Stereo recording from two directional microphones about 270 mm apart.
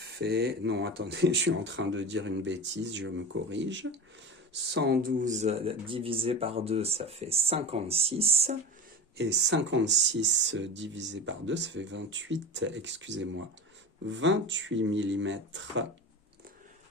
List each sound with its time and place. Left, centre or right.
0.2 s speech: right
9.1 s speech: right